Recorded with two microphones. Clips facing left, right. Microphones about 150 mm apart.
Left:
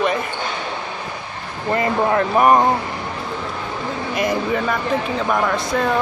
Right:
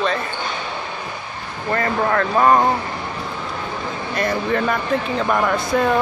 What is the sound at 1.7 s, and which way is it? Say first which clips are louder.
Speech: left 2 dB; 20° left (ahead or behind).